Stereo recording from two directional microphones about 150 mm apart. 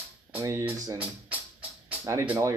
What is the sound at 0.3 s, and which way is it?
Speech, 20° right (ahead or behind).